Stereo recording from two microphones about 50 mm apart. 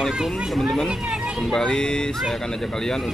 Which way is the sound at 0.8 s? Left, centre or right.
Centre.